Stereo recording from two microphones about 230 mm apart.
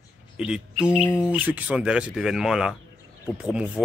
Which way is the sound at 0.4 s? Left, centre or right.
Centre.